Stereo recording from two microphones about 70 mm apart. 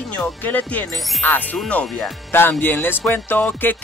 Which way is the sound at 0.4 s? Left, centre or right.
Left.